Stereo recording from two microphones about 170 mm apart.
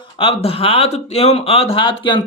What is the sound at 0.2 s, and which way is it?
Speech, 35° left (ahead or behind).